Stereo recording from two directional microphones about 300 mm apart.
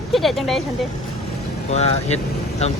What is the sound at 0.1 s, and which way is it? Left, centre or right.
Speech, centre.